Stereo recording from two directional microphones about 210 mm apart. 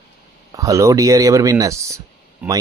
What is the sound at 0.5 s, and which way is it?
Speech, 15° right (ahead or behind).